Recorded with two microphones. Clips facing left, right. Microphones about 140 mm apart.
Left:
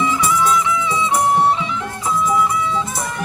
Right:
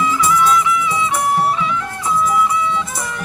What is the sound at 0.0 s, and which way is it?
Music, 25° left (ahead or behind).